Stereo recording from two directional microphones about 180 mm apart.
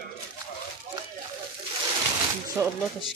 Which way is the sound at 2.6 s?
15° right (ahead or behind).